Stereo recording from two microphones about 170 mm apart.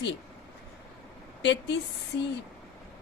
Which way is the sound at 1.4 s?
90° left.